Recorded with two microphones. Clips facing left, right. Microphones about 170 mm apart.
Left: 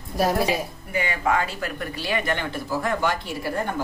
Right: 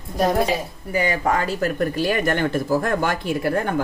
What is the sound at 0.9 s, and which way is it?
Speech, 40° right (ahead or behind).